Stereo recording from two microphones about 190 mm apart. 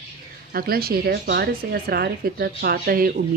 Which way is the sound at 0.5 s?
50° right (ahead or behind).